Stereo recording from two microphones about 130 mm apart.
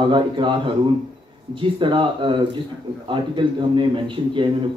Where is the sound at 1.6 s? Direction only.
40° right (ahead or behind).